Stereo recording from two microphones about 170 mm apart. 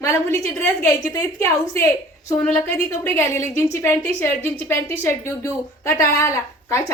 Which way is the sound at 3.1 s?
15° left (ahead or behind).